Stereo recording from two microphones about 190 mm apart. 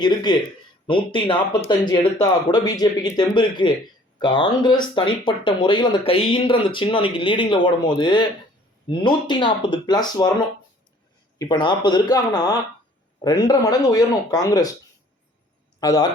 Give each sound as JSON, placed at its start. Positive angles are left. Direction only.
{"t": 0.0, "sound": "speech", "side_deg": 20}
{"t": 11.3, "sound": "speech", "side_deg": 25}
{"t": 15.8, "sound": "speech", "side_deg": 20}